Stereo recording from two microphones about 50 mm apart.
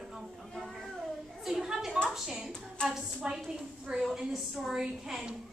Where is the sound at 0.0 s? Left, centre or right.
Centre.